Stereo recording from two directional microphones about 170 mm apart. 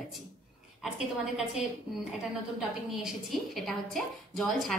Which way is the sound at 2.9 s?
5° right (ahead or behind).